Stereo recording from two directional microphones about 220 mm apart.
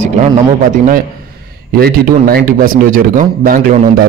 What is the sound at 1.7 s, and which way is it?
Speech, 45° right (ahead or behind).